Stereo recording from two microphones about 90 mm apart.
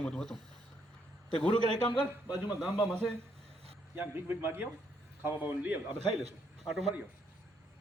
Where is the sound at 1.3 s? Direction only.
65° left (ahead or behind).